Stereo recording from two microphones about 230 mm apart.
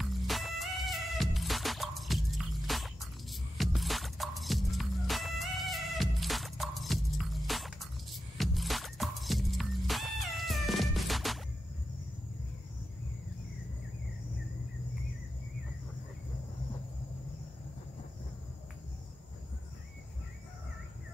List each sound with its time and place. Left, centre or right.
0.0 s music: centre